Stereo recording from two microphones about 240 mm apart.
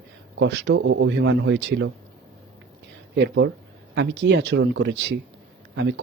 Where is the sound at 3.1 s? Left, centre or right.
Right.